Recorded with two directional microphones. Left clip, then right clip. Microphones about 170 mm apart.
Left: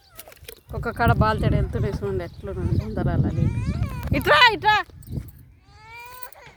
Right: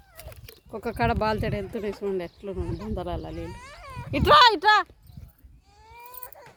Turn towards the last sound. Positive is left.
turn(degrees=-20)  # may be behind; listen again after turning